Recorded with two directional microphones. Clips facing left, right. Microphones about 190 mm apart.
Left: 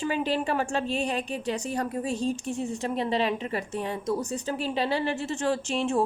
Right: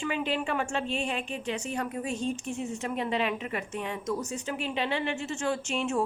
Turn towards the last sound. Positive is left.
turn(degrees=35)  # may be behind; listen again after turning